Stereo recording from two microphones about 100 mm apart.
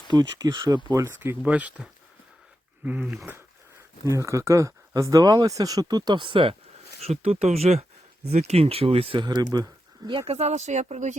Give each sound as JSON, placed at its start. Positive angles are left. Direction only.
{"t": 0.1, "sound": "speech", "side_deg": -45}
{"t": 0.9, "sound": "speech", "side_deg": -25}
{"t": 1.5, "sound": "speech", "side_deg": -15}
{"t": 4.0, "sound": "speech", "side_deg": -30}
{"t": 6.1, "sound": "speech", "side_deg": -55}
{"t": 7.0, "sound": "speech", "side_deg": -90}
{"t": 9.1, "sound": "speech", "side_deg": -45}
{"t": 10.1, "sound": "speech", "side_deg": -75}